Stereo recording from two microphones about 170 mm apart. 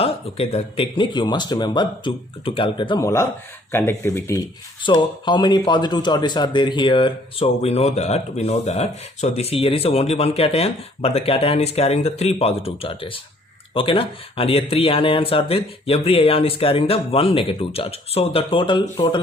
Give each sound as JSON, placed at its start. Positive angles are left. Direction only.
{"t": 0.0, "sound": "speech", "side_deg": 35}
{"t": 3.0, "sound": "speech", "side_deg": 15}
{"t": 4.8, "sound": "speech", "side_deg": 25}